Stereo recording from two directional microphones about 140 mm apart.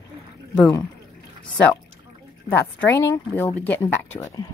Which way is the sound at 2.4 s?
15° left (ahead or behind).